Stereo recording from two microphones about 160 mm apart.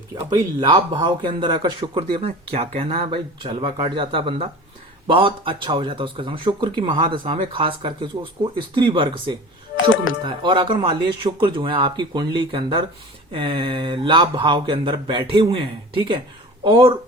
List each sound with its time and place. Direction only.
0.3 s speech: 25° right (ahead or behind)
16.6 s speech: 30° right (ahead or behind)